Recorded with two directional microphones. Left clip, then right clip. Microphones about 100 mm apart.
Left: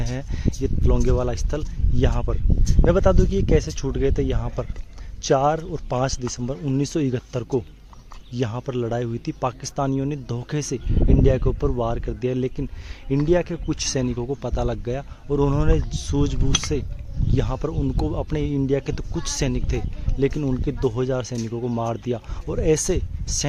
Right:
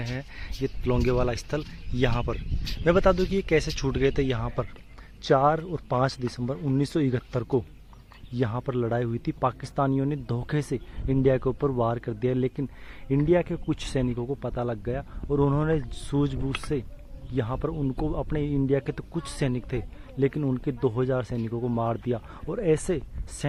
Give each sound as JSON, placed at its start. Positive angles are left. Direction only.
{"t": 0.1, "sound": "speech", "side_deg": 40}
{"t": 0.9, "sound": "speech", "side_deg": 0}
{"t": 14.0, "sound": "speech", "side_deg": 25}
{"t": 15.3, "sound": "speech", "side_deg": 15}